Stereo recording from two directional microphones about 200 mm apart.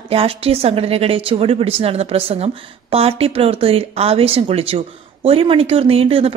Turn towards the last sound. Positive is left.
turn(degrees=-30)  # may be behind; listen again after turning